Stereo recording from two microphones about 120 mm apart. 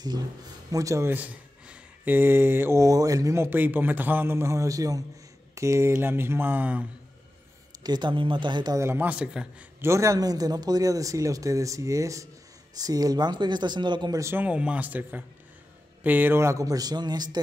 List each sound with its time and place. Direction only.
0.7 s speech: 25° right (ahead or behind); by 6.9 s 10° right (ahead or behind)
7.8 s speech: 40° right (ahead or behind)
8.7 s speech: 20° right (ahead or behind)
9.8 s speech: 25° right (ahead or behind)
14.2 s speech: 15° right (ahead or behind); by 17.4 s 35° right (ahead or behind)